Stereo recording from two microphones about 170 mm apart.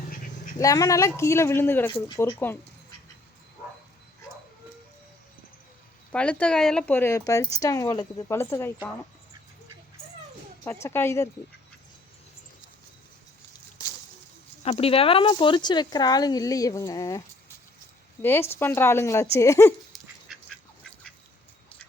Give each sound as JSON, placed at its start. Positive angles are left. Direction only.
{"t": 0.6, "sound": "a woman's voice", "side_deg": 20}
{"t": 6.1, "sound": "a woman's voice", "side_deg": 5}
{"t": 10.6, "sound": "a woman's voice", "side_deg": 15}
{"t": 14.6, "sound": "a woman's voice", "side_deg": 35}
{"t": 19.9, "sound": "dog", "side_deg": 0}